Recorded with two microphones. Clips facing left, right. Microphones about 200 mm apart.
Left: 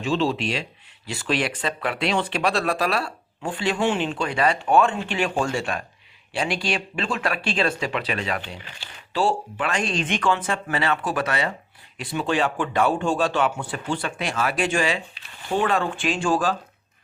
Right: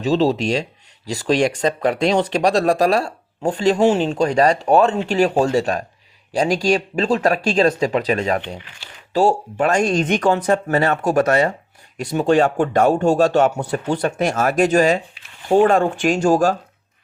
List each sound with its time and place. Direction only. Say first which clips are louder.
0.0 s speech: right 6 dB; 40° right (ahead or behind)